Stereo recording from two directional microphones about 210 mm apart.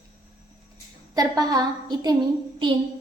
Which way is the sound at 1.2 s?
20° right (ahead or behind).